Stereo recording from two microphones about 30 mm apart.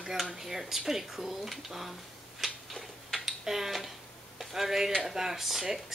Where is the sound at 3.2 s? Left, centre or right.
Centre.